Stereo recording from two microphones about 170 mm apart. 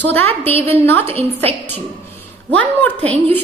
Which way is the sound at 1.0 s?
35° right (ahead or behind).